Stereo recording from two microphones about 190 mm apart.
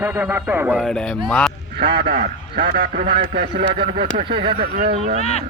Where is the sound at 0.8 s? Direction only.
5° left (ahead or behind).